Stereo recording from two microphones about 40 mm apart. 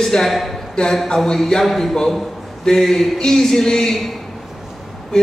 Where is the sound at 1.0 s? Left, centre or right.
Centre.